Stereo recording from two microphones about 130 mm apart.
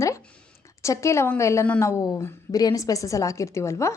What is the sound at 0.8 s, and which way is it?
A woman's voice, 20° left (ahead or behind).